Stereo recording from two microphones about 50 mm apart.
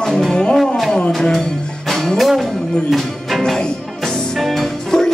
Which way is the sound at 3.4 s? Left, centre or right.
Centre.